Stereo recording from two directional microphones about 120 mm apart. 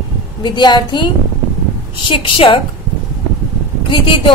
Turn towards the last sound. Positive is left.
turn(degrees=45)  # may be behind; listen again after turning